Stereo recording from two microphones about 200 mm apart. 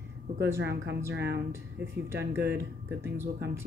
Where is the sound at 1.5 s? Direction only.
15° right (ahead or behind).